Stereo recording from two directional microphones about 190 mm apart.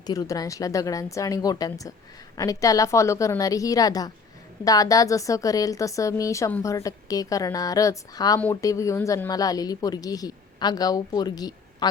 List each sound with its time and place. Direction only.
0.0 s a woman's voice: 20° left (ahead or behind)